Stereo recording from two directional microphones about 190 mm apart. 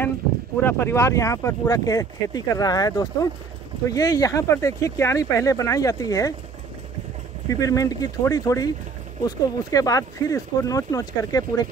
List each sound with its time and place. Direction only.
0.7 s speech: 15° left (ahead or behind)
7.4 s speech: 15° left (ahead or behind)